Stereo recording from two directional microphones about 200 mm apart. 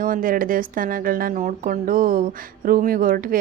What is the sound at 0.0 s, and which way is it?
A woman's voice, 45° right (ahead or behind).